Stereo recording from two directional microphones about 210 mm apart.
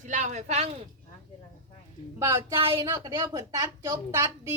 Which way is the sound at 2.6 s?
25° right (ahead or behind).